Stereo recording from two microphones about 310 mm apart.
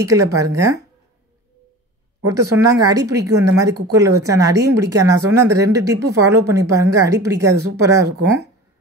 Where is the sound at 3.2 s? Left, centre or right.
Right.